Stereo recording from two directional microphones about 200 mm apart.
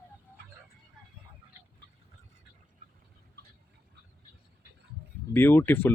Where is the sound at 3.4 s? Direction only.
55° right (ahead or behind).